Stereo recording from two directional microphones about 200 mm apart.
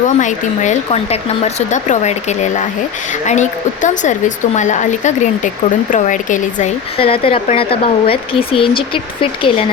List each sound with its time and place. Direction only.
0.2 s speech: 40° left (ahead or behind)
7.0 s speech: 25° left (ahead or behind)